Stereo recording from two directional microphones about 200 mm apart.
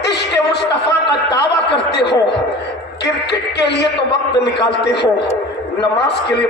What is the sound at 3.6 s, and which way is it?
A man's voice, 60° left (ahead or behind).